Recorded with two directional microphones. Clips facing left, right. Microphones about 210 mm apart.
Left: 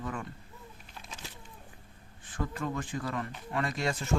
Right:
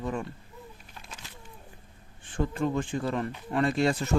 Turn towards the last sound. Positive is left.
turn(degrees=-30)  # may be behind; listen again after turning